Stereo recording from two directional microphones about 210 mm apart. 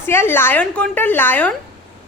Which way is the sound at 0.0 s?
10° left (ahead or behind).